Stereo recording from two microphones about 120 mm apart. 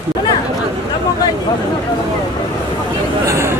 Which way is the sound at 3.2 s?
20° right (ahead or behind).